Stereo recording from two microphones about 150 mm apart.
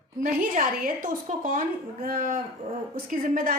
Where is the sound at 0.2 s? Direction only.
70° right (ahead or behind).